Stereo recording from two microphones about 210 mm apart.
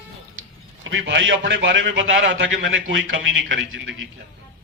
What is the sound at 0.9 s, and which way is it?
A man's voice, 60° right (ahead or behind).